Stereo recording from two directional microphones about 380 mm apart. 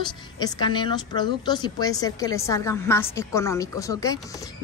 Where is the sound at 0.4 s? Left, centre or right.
Centre.